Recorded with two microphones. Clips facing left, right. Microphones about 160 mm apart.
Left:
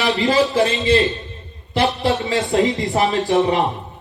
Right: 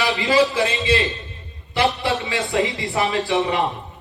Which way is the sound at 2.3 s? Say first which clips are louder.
Left 4 dB; 40° left (ahead or behind).